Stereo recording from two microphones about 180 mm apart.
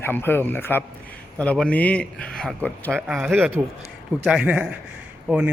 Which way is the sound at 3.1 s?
5° right (ahead or behind).